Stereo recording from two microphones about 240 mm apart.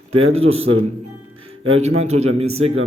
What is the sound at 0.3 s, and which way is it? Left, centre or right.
Speech, right.